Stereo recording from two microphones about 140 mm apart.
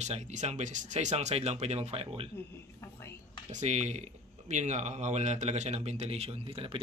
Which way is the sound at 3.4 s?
55° right (ahead or behind).